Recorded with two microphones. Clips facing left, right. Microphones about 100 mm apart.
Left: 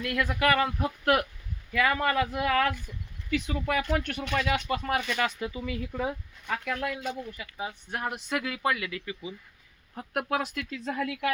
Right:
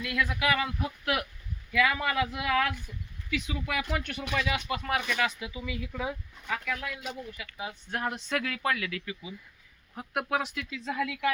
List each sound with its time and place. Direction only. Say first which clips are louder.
0.0 s speech: left 3 dB; 45° left (ahead or behind)
7.9 s speech: right 2 dB; 10° left (ahead or behind)
10.2 s speech: left 1 dB; 50° left (ahead or behind)